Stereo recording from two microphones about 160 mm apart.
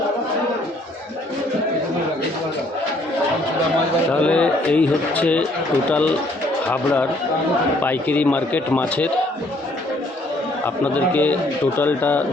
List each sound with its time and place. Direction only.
4.1 s speech: 5° left (ahead or behind)
10.9 s speech: 10° left (ahead or behind)